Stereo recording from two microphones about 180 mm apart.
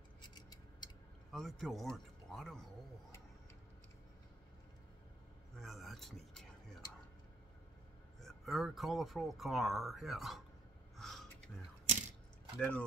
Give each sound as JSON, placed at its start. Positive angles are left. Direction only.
{"t": 0.3, "sound": "a sound", "side_deg": 25}
{"t": 1.3, "sound": "speech", "side_deg": 0}
{"t": 5.6, "sound": "a sound", "side_deg": 0}
{"t": 8.2, "sound": "speech", "side_deg": 0}
{"t": 11.0, "sound": "gasp", "side_deg": 0}
{"t": 12.5, "sound": "speech", "side_deg": 5}